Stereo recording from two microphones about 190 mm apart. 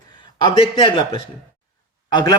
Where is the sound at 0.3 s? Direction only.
25° left (ahead or behind).